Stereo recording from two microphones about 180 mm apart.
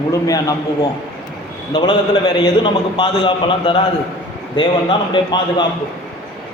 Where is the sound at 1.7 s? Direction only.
25° left (ahead or behind).